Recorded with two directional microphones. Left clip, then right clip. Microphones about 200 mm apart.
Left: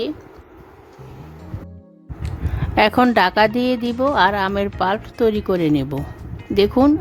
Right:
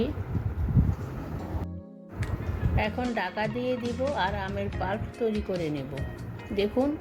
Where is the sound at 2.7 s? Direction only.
50° left (ahead or behind).